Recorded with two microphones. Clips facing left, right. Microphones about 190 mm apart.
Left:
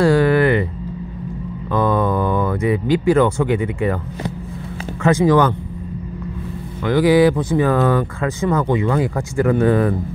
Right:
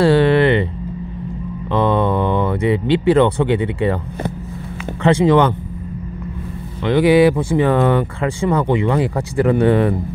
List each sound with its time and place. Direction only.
0.0 s a sound: 30° right (ahead or behind)
1.7 s speech: 25° right (ahead or behind)
5.0 s speech: 30° right (ahead or behind)
6.8 s speech: 25° right (ahead or behind)